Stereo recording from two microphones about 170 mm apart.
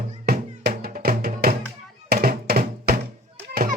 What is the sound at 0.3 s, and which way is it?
Music, 65° right (ahead or behind).